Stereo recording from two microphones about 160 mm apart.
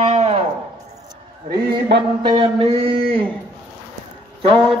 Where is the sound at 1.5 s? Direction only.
30° right (ahead or behind).